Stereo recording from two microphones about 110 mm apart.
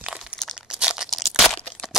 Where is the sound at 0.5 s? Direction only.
5° right (ahead or behind).